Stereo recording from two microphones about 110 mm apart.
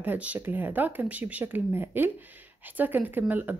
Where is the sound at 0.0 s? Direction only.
15° right (ahead or behind).